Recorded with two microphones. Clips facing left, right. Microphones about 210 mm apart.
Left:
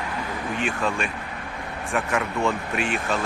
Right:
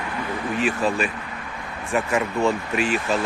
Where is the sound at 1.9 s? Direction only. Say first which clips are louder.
Right 3 dB; centre (ahead or behind).